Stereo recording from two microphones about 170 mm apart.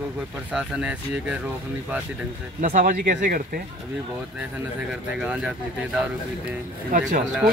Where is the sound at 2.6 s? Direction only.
50° right (ahead or behind).